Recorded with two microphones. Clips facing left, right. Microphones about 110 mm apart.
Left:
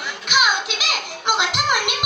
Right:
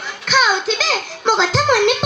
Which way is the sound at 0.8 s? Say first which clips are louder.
Right 5 dB; 35° right (ahead or behind).